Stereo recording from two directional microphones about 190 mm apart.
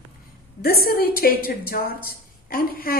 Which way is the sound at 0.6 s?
50° left (ahead or behind).